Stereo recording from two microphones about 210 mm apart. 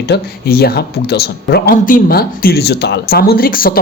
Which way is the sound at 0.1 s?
45° left (ahead or behind).